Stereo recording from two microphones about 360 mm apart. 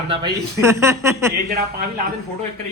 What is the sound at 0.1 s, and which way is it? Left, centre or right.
Speech, centre.